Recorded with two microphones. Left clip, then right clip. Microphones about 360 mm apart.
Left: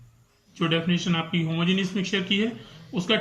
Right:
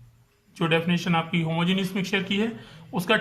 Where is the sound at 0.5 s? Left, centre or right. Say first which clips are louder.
Right 1 dB; centre.